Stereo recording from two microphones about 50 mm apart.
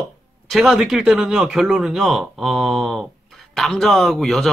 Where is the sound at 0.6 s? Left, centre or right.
Centre.